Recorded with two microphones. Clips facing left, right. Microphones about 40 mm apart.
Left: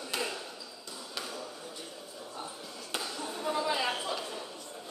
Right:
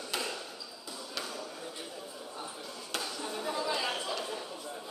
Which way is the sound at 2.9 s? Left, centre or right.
Centre.